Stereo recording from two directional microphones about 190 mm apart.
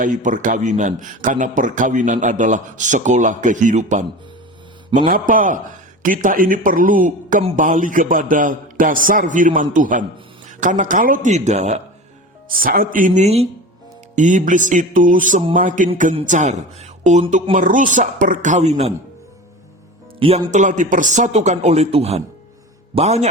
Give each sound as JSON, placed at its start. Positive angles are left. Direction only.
{"t": 0.0, "sound": "a man's voice", "side_deg": -45}
{"t": 12.5, "sound": "a man's voice", "side_deg": -50}
{"t": 20.1, "sound": "a man's voice", "side_deg": -30}